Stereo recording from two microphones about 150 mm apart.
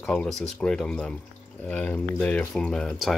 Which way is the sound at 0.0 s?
5° left (ahead or behind).